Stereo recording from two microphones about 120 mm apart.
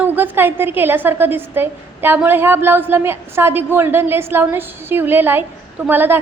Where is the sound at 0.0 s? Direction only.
15° right (ahead or behind).